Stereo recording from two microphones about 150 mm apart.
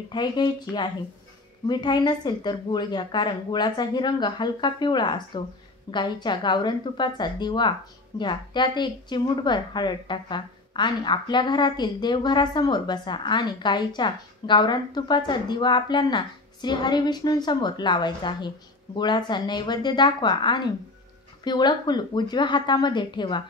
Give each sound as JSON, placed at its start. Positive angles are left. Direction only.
{"t": 0.1, "sound": "a woman's voice", "side_deg": 30}